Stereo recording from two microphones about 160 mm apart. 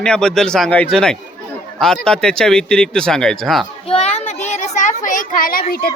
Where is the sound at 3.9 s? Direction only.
40° left (ahead or behind); by 5.9 s 65° left (ahead or behind).